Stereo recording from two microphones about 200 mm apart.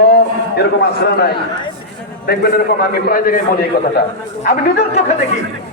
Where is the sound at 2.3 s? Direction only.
50° left (ahead or behind).